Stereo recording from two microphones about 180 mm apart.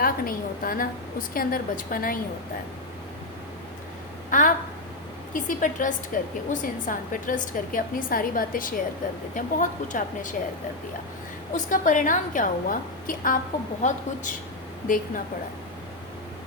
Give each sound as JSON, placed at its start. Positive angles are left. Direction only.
{"t": 0.0, "sound": "a woman's voice", "side_deg": 50}
{"t": 4.3, "sound": "a woman's voice", "side_deg": 50}
{"t": 11.5, "sound": "a woman's voice", "side_deg": 45}
{"t": 14.8, "sound": "a woman's voice", "side_deg": 50}